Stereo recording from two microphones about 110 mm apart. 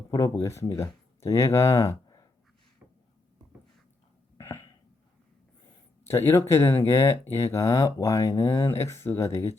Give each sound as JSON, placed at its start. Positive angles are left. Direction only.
{"t": 0.1, "sound": "speech", "side_deg": 30}
{"t": 4.4, "sound": "a sound", "side_deg": 25}
{"t": 6.1, "sound": "speech", "side_deg": 20}